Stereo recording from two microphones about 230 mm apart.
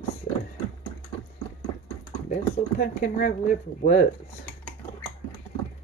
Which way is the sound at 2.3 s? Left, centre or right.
Left.